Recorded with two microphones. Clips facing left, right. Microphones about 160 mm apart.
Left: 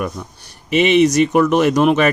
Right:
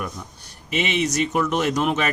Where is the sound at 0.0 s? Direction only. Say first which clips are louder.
Left 7 dB; 80° left.